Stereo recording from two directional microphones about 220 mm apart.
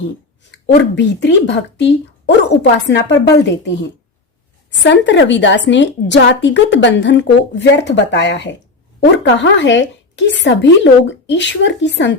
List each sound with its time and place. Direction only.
0.9 s a woman's voice: 55° left (ahead or behind)